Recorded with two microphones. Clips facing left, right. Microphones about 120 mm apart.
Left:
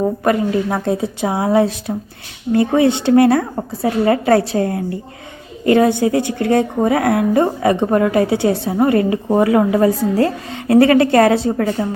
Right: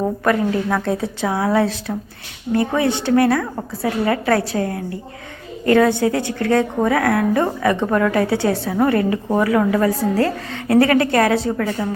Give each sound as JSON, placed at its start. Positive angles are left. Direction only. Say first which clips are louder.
{"t": 0.3, "sound": "a woman's voice", "louder": "left 1 dB", "side_deg": 25}
{"t": 5.7, "sound": "a woman's voice", "louder": "left 2 dB", "side_deg": 20}